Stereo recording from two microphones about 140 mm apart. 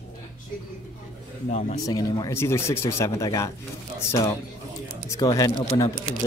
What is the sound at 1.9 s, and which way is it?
Speech, 25° left (ahead or behind).